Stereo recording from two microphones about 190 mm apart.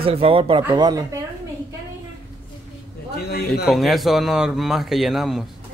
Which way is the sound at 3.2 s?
55° left (ahead or behind).